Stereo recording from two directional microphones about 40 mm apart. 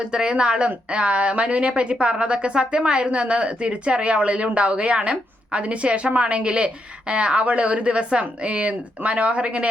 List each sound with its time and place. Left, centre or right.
0.0 s a woman's voice: right